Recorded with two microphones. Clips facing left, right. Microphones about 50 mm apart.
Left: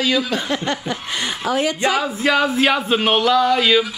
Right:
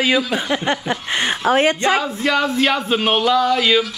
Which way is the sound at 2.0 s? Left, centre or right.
Centre.